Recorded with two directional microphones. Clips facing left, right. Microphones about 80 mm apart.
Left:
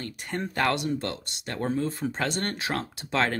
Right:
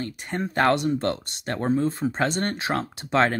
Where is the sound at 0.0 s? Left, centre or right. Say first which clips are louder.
Right 3 dB; right.